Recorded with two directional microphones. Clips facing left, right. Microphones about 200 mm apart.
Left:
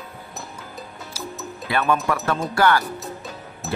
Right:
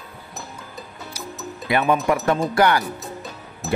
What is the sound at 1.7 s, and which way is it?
Speech, 15° right (ahead or behind).